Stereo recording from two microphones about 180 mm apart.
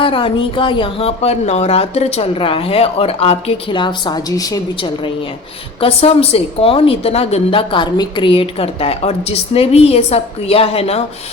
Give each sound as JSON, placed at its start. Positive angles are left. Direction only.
{"t": 0.0, "sound": "a woman's voice", "side_deg": 30}